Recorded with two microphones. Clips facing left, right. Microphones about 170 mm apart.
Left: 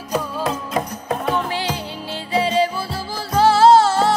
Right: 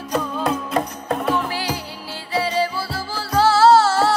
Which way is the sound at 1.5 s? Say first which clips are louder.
Left 2 dB; 25° left (ahead or behind).